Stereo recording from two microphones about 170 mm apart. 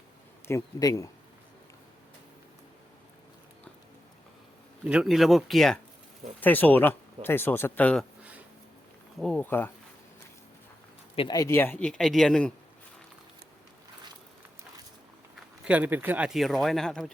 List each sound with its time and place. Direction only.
0.4 s speech: 20° left (ahead or behind)
4.9 s speech: 5° right (ahead or behind)
8.2 s a sound: 10° right (ahead or behind)
9.1 s speech: centre (ahead or behind)
9.4 s speech: 10° left (ahead or behind)
11.1 s speech: 30° left (ahead or behind); by 12.5 s 5° left (ahead or behind)
15.6 s speech: 10° right (ahead or behind)